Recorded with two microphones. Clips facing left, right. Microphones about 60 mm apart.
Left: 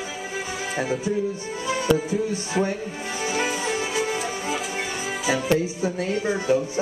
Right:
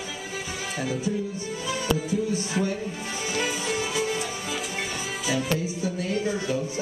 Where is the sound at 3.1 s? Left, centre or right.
Left.